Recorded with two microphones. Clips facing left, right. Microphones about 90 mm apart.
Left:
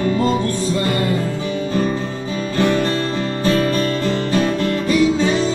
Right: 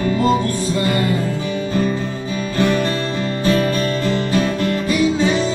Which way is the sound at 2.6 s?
30° left (ahead or behind).